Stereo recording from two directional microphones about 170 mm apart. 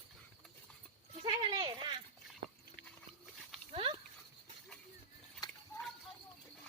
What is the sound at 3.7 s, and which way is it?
Horse, 30° right (ahead or behind).